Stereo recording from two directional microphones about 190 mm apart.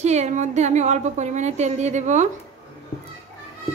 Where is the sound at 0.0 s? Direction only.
35° right (ahead or behind).